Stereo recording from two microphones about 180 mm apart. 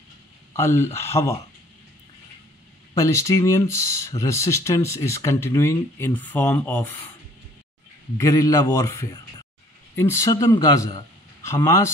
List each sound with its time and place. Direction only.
0.5 s speech: 15° left (ahead or behind)
2.9 s speech: 15° left (ahead or behind)
8.2 s speech: 15° left (ahead or behind)